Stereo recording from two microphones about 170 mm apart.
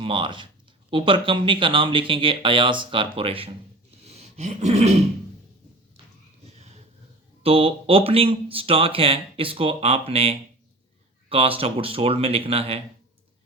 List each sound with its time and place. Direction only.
0.0 s speech: 30° right (ahead or behind)
4.0 s a sound: 40° right (ahead or behind)
7.4 s speech: 35° right (ahead or behind)